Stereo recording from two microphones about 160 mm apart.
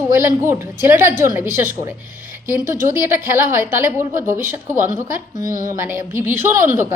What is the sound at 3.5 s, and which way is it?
A woman's voice, 15° right (ahead or behind).